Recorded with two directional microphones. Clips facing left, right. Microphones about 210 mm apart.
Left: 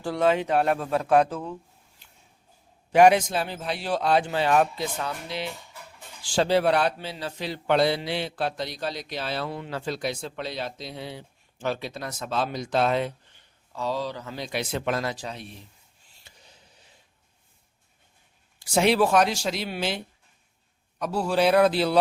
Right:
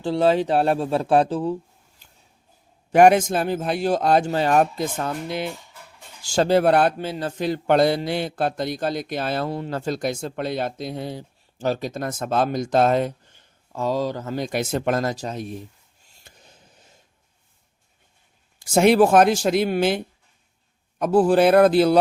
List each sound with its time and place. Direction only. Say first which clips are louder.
0.0 s speech: right 4 dB; 30° right (ahead or behind)
2.9 s a man's voice: right 3 dB; 50° right (ahead or behind)
16.0 s a sound: right 4 dB; 50° right (ahead or behind)
18.6 s a man's voice: right 6 dB; 45° right (ahead or behind)
21.0 s a man's voice: right 7 dB; 50° right (ahead or behind)